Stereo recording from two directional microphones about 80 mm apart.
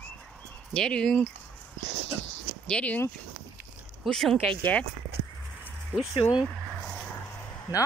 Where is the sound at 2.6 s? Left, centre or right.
Centre.